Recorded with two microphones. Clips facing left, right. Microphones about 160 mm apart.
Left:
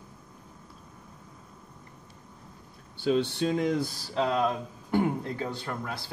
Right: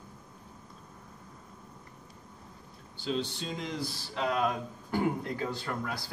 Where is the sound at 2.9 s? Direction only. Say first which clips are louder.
Left 7 dB; 60° left (ahead or behind).